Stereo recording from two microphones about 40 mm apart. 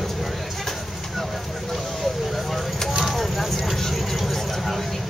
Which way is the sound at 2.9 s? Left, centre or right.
Centre.